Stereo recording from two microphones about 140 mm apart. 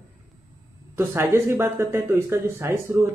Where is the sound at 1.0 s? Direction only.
20° right (ahead or behind).